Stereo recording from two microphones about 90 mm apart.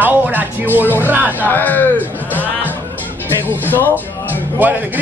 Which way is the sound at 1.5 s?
20° left (ahead or behind).